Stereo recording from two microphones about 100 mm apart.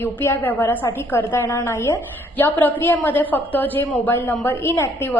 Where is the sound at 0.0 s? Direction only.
20° left (ahead or behind).